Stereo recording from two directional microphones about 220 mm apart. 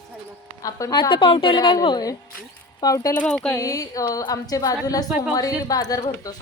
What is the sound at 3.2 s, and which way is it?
Speech, 5° left (ahead or behind).